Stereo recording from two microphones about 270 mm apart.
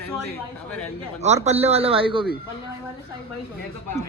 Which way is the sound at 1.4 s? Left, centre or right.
Right.